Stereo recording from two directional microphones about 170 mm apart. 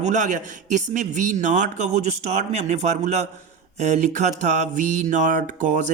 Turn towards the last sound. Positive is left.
turn(degrees=-50)  # may be behind; listen again after turning